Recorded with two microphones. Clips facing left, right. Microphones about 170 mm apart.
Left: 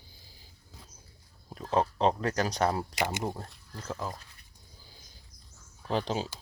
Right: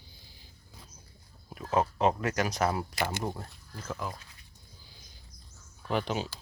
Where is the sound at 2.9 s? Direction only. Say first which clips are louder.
Left 1 dB; 20° left (ahead or behind).